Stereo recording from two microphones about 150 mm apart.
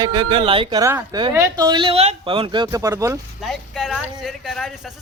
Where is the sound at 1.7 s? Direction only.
35° right (ahead or behind); by 3.2 s 20° right (ahead or behind).